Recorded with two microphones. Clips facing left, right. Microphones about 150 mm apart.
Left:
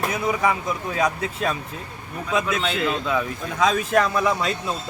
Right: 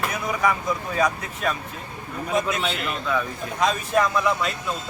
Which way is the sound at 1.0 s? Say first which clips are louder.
Left 2 dB; 30° left (ahead or behind).